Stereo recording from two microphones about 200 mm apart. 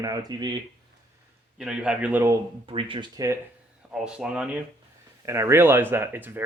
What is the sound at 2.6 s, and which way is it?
Speech, 25° right (ahead or behind).